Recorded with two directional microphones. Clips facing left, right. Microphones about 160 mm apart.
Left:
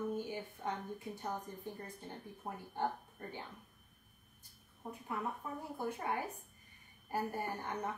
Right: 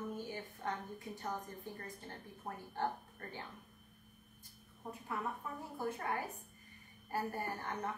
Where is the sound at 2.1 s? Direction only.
15° left (ahead or behind).